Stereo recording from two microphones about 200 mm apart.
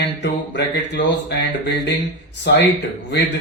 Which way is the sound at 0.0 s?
60° left (ahead or behind).